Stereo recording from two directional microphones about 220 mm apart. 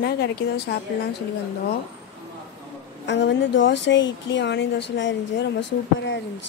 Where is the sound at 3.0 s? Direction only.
55° left (ahead or behind).